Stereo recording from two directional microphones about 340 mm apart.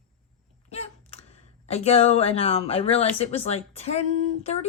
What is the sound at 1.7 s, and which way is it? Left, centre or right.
Speech, centre.